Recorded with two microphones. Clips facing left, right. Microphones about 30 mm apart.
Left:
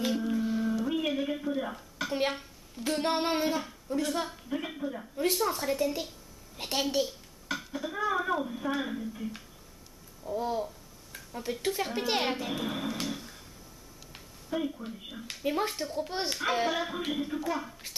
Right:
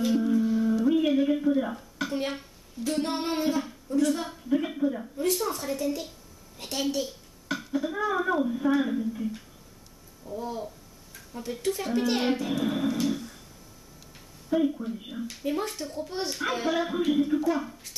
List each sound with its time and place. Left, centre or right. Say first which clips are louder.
0.1 s music: right 6 dB; centre
0.7 s a sound: right 7 dB; centre
3.0 s a child's voice: left 1 dB; centre
7.4 s speech: right 5 dB; centre
10.2 s speech: left 3 dB; left
11.6 s a child's voice: right 5 dB; centre
13.0 s a sound: right 7 dB; centre
14.5 s speech: right 7 dB; centre
15.4 s a child's voice: even; centre
16.0 s speech: right 1 dB; left
16.3 s a child's voice: right 2 dB; centre